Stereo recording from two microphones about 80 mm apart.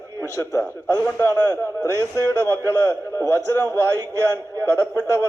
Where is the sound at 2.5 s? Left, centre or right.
Left.